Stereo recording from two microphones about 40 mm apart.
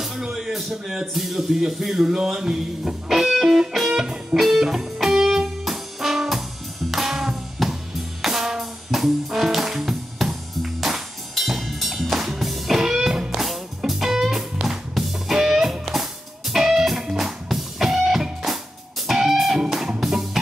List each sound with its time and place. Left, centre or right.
0.3 s speech: centre
3.7 s music: centre
4.0 s music: centre
4.4 s music: centre
13.4 s music: centre